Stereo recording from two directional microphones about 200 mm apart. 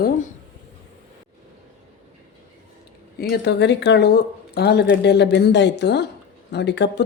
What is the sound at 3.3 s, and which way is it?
Speech, 60° left (ahead or behind).